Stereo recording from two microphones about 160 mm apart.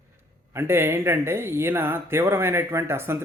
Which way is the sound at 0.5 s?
15° right (ahead or behind).